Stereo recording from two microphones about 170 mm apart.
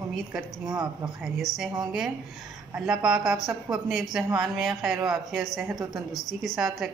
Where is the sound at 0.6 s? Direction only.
25° right (ahead or behind).